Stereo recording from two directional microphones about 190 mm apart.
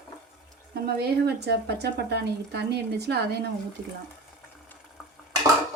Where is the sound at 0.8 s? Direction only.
60° right (ahead or behind).